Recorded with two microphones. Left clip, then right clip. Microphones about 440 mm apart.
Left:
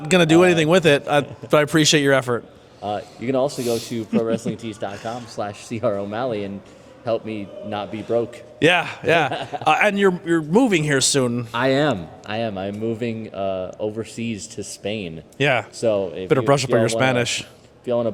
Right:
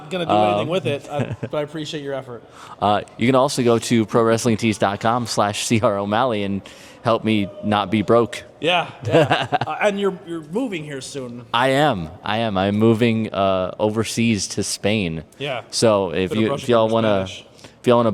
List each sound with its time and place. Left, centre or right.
0.1 s a man's voice: left
1.5 s speech: left
2.8 s speech: right
8.5 s a man's voice: left
9.3 s a man's voice: right
9.6 s speech: left
11.5 s speech: right
15.4 s a man's voice: left
15.7 s speech: right
16.8 s speech: left
17.8 s a man's voice: right